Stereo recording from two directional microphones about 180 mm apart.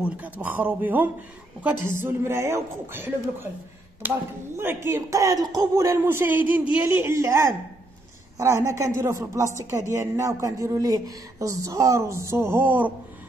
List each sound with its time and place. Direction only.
0.0 s a woman's voice: 10° right (ahead or behind)